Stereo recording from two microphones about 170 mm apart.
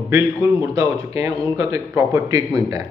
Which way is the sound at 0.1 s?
15° right (ahead or behind).